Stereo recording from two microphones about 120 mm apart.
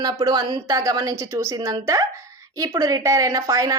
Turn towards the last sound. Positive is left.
turn(degrees=-25)  # may be behind; listen again after turning